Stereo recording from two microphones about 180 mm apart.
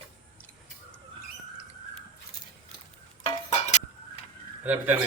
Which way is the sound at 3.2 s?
40° left (ahead or behind).